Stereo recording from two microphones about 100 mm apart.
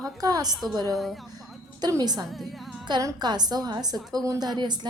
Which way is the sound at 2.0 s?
45° right (ahead or behind).